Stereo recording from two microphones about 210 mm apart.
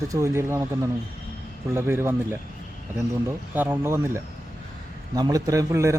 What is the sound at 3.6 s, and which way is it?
Speech, 10° right (ahead or behind).